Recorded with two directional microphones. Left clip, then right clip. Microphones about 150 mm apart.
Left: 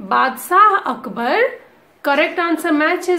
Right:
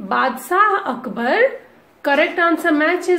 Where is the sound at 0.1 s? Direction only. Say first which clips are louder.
Left 3 dB; 20° left (ahead or behind).